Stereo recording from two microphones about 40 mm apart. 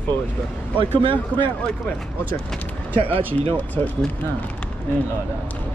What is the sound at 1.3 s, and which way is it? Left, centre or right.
Speech, left.